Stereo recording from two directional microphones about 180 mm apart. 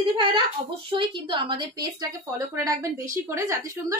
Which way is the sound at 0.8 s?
25° right (ahead or behind).